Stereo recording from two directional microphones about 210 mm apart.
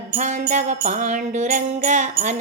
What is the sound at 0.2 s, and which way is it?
Music, 35° right (ahead or behind).